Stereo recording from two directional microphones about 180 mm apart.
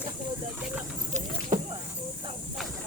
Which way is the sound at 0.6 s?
10° right (ahead or behind).